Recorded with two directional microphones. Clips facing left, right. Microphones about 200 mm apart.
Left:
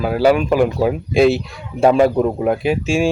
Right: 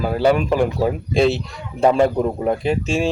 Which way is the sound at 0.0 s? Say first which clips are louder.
Left 2 dB; 5° left (ahead or behind).